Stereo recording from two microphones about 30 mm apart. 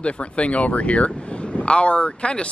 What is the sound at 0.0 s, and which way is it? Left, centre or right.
Speech, left.